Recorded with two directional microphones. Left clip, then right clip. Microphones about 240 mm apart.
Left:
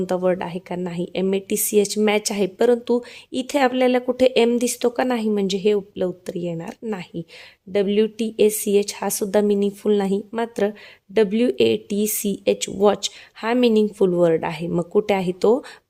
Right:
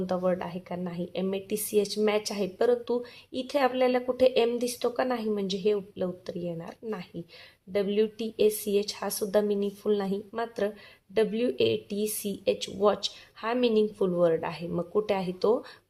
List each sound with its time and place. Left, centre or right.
0.0 s a woman's voice: left